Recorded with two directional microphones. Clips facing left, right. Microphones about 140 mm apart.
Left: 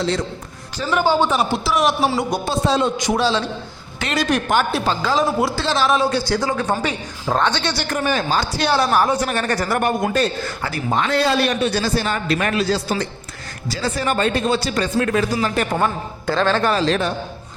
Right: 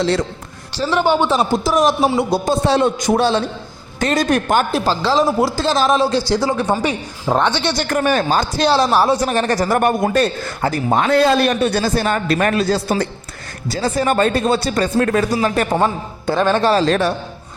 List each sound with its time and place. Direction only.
1.0 s a man's voice: 20° right (ahead or behind)
1.5 s a man's voice: 40° right (ahead or behind)
2.0 s a man's voice: 25° right (ahead or behind)
2.6 s a man's voice: 60° right (ahead or behind); by 6.5 s 35° right (ahead or behind)
6.6 s a woman's voice: 15° right (ahead or behind)
7.9 s a woman's voice: 50° right (ahead or behind)
8.5 s a woman's voice: 35° right (ahead or behind)
15.7 s a man's voice: 25° right (ahead or behind)
16.4 s a woman's voice: 15° right (ahead or behind)
16.6 s a man's voice: 40° right (ahead or behind)